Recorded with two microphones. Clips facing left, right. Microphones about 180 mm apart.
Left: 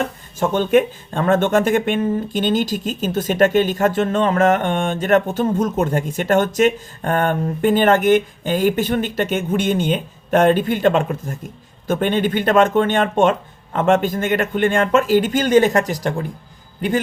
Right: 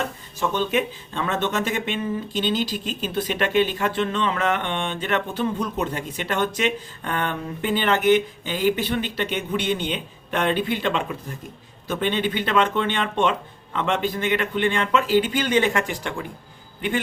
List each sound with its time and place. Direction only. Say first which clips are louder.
0.3 s speech: left 7 dB; 50° left (ahead or behind)